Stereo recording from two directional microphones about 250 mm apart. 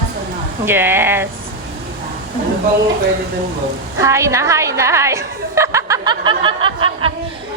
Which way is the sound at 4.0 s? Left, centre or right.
Centre.